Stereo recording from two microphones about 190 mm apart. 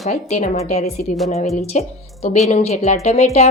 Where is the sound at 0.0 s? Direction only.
35° left (ahead or behind).